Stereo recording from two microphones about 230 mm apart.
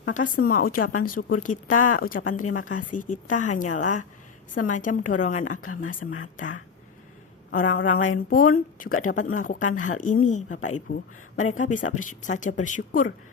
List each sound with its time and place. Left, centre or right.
0.0 s speech: left
2.4 s speech: left
3.0 s speech: left
6.0 s speech: left
6.3 s speech: left
7.8 s speech: left
8.3 s speech: left
9.1 s speech: left
9.4 s speech: left